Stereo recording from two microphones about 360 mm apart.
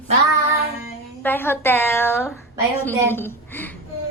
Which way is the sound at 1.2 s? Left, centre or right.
Centre.